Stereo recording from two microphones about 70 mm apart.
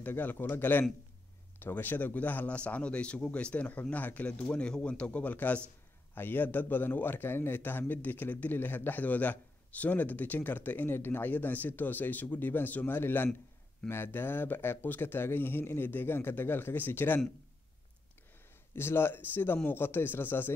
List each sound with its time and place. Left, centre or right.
0.0 s a man's voice: left
18.8 s speech: left